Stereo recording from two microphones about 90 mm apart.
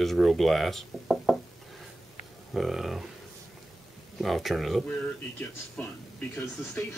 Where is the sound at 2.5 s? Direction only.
5° right (ahead or behind).